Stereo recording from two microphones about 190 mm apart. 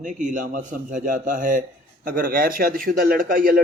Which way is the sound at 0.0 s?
40° right (ahead or behind).